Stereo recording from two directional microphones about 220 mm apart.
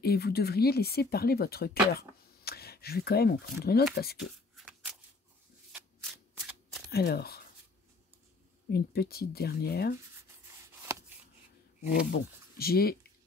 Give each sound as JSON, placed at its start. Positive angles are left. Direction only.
{"t": 0.0, "sound": "speech", "side_deg": 45}
{"t": 4.6, "sound": "shuffle", "side_deg": -5}
{"t": 6.9, "sound": "speech", "side_deg": 45}
{"t": 8.7, "sound": "speech", "side_deg": 45}
{"t": 10.8, "sound": "a sound", "side_deg": -15}
{"t": 12.1, "sound": "speech", "side_deg": 45}